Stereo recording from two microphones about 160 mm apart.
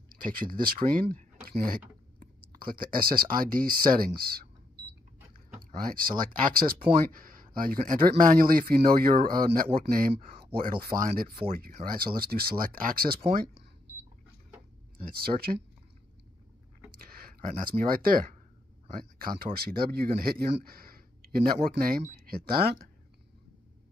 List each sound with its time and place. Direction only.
0.1 s speech: 60° right (ahead or behind)
5.6 s a sound: 65° right (ahead or behind)
6.1 s speech: 60° right (ahead or behind)
15.1 s speech: 75° right (ahead or behind)
16.9 s speech: 65° right (ahead or behind)